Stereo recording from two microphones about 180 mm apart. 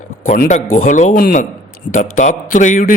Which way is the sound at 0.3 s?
45° left (ahead or behind).